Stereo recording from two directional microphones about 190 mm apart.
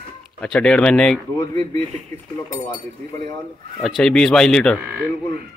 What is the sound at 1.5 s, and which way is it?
Speech, 20° left (ahead or behind).